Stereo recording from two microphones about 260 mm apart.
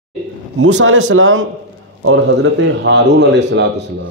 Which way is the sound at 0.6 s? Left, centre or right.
Right.